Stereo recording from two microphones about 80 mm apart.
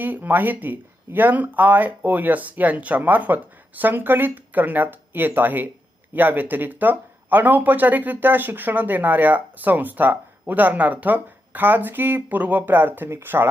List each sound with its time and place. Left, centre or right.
0.0 s speech: right